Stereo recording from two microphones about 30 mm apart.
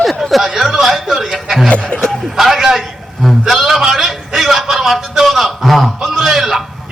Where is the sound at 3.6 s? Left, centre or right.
Centre.